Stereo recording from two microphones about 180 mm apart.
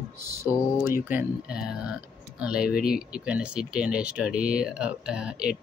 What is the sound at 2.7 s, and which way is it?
Speech, 55° left (ahead or behind).